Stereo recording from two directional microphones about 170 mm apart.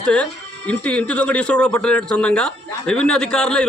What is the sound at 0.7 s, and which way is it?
A man's voice, 5° left (ahead or behind).